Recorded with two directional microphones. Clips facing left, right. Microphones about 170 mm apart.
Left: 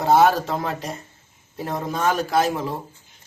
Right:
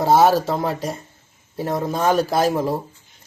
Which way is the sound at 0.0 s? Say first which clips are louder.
Right 1 dB; 35° right (ahead or behind).